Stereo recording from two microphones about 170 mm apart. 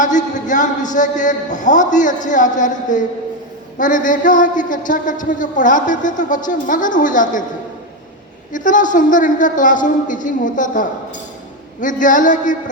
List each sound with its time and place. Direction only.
0.0 s a man's voice: 45° left (ahead or behind)
8.5 s a man's voice: 50° left (ahead or behind)